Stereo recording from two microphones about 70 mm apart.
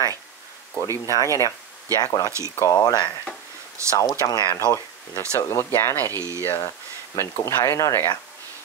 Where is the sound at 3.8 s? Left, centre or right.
Right.